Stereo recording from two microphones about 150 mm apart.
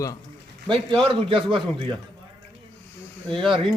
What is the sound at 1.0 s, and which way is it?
Speech, 35° right (ahead or behind).